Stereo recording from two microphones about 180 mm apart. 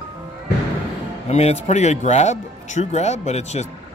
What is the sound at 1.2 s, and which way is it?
Speech, 35° left (ahead or behind).